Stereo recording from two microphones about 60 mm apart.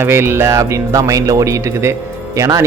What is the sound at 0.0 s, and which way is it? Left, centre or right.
Speech, right.